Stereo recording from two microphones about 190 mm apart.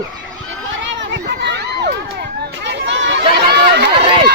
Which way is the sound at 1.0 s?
65° right (ahead or behind).